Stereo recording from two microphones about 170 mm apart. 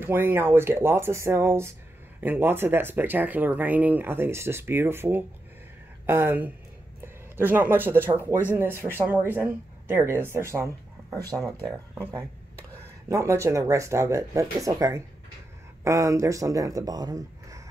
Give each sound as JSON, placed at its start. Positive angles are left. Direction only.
{"t": 0.0, "sound": "speech", "side_deg": -15}
{"t": 13.1, "sound": "speech", "side_deg": -15}